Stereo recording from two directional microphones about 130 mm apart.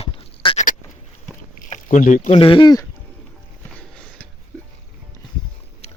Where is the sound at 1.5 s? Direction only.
80° left.